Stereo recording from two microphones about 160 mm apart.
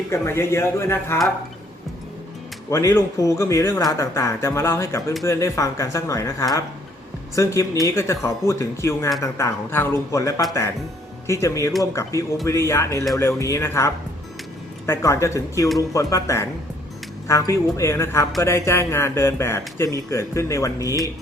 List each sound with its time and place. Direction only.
0.1 s speech: 15° left (ahead or behind)
2.6 s speech: 20° left (ahead or behind)